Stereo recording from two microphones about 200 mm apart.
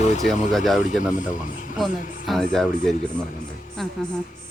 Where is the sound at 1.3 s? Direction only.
40° left (ahead or behind).